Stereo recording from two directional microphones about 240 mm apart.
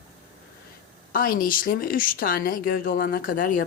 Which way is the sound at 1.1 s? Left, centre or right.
Left.